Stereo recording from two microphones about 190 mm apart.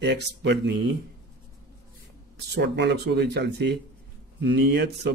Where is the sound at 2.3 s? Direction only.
60° right (ahead or behind).